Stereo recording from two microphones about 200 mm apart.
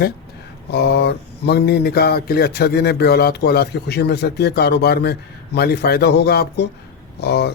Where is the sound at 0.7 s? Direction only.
55° left (ahead or behind).